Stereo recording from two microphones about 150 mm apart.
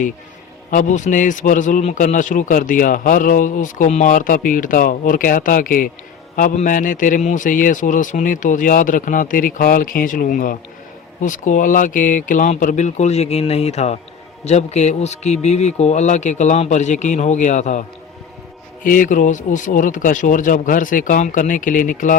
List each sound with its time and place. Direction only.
0.7 s a man's voice: 55° left (ahead or behind)
18.9 s a man's voice: 65° left (ahead or behind)